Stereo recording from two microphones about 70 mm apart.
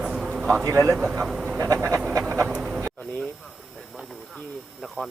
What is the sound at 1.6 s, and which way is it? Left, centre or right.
Speech, right.